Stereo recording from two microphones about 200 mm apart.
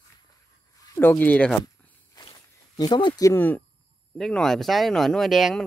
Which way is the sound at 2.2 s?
20° left (ahead or behind).